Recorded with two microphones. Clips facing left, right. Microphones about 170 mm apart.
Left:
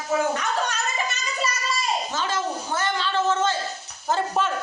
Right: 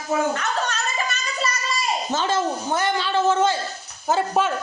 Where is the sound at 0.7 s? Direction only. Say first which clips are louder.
Right 1 dB; 10° left (ahead or behind).